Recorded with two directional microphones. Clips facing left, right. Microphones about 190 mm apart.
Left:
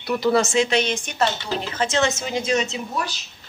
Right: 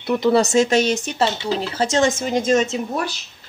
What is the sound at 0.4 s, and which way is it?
Speech, 40° right (ahead or behind).